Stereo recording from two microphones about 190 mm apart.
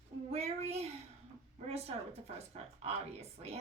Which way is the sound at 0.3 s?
35° right (ahead or behind).